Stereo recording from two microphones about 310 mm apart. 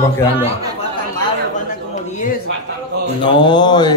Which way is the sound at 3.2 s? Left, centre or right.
Centre.